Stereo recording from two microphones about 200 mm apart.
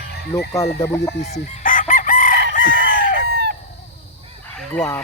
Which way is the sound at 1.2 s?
40° left (ahead or behind).